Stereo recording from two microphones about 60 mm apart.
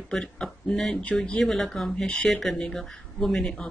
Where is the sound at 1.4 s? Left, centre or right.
Centre.